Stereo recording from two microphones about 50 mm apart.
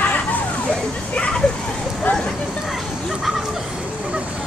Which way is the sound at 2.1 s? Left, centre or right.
Left.